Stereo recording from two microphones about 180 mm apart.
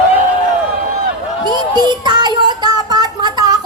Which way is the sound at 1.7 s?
25° right (ahead or behind).